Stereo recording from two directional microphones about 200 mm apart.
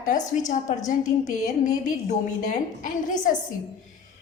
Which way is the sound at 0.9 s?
40° left (ahead or behind).